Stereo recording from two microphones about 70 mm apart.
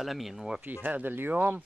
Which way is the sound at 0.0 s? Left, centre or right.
Centre.